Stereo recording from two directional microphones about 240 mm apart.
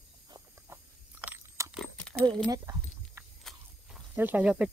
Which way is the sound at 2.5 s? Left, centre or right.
Centre.